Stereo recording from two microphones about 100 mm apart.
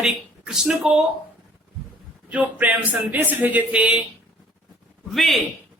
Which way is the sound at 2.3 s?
15° right (ahead or behind).